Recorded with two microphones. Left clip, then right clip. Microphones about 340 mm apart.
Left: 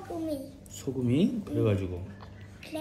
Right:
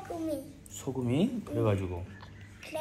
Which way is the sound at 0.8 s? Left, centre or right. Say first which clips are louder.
Left 3 dB; centre.